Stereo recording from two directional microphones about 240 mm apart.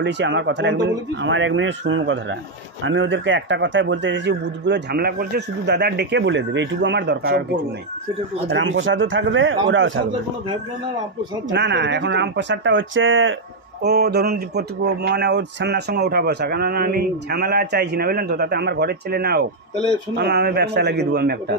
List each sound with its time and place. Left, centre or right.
0.0 s a man's voice: right
8.5 s a man's voice: right
11.5 s a man's voice: right
13.8 s a man's voice: right